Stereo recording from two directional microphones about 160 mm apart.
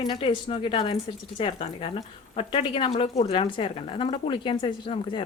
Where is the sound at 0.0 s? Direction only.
30° left (ahead or behind).